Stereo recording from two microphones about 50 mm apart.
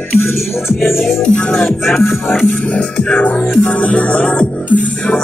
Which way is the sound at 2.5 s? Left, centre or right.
Left.